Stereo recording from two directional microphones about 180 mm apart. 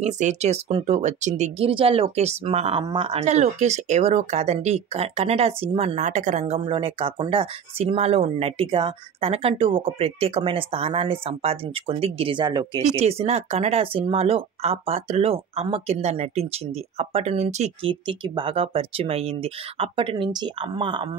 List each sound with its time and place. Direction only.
0.0 s speech: 40° right (ahead or behind); by 12.8 s 25° right (ahead or behind)
13.0 s speech: 35° right (ahead or behind)